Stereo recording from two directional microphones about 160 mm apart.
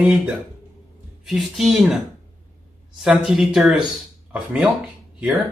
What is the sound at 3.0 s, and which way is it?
Speech, centre (ahead or behind).